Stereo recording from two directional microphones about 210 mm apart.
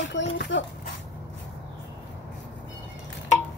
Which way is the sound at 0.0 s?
60° left (ahead or behind).